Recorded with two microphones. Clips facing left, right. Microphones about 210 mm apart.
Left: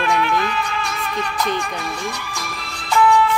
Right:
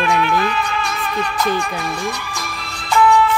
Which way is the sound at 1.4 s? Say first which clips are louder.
Right 3 dB; 5° right (ahead or behind).